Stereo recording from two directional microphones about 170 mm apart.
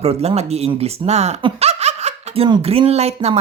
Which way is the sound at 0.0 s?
35° right (ahead or behind).